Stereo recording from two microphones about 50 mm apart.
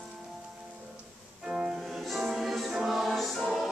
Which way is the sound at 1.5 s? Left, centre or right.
Centre.